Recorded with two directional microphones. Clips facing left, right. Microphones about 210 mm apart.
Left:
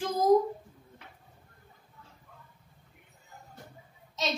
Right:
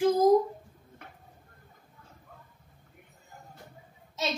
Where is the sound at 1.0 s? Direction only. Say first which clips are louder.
Right 5 dB; 50° right (ahead or behind).